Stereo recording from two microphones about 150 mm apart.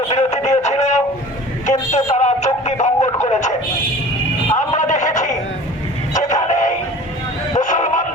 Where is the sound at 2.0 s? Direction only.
50° left (ahead or behind).